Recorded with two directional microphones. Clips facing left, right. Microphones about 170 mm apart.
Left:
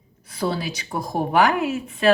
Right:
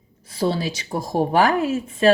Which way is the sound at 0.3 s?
30° right (ahead or behind).